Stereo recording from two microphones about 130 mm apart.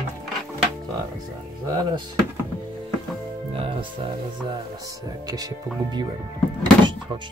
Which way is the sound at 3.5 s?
40° right (ahead or behind).